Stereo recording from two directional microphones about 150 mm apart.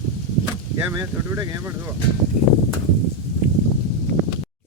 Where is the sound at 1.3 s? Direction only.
15° right (ahead or behind).